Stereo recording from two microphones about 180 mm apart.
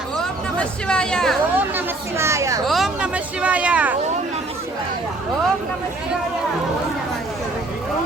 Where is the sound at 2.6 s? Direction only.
Centre (ahead or behind).